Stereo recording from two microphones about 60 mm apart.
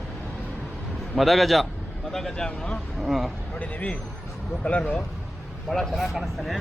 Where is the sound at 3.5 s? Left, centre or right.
Left.